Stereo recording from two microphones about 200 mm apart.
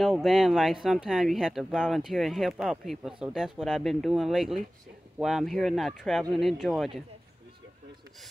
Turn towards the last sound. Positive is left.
turn(degrees=0)  # may be behind; listen again after turning